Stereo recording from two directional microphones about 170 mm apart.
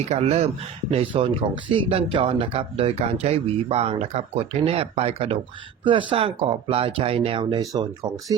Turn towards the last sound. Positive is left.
turn(degrees=-25)  # may be behind; listen again after turning